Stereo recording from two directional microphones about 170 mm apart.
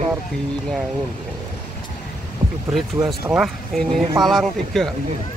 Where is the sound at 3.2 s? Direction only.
5° right (ahead or behind).